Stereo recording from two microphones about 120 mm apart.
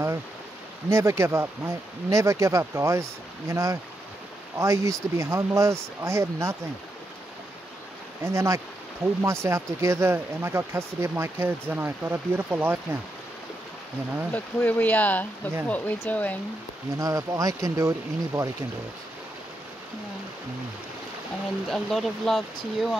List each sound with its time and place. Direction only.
0.8 s speech: 25° right (ahead or behind)
8.2 s speech: 25° right (ahead or behind)
14.3 s speech: 15° left (ahead or behind)
17.0 s speech: 25° right (ahead or behind)
21.6 s speech: centre (ahead or behind)